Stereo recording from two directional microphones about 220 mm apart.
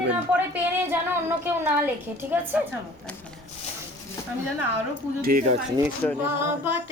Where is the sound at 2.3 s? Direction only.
10° right (ahead or behind).